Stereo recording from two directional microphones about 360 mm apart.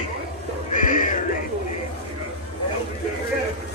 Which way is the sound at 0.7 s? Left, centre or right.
Left.